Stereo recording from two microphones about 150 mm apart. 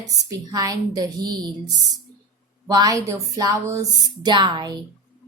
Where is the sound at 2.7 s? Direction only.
25° right (ahead or behind).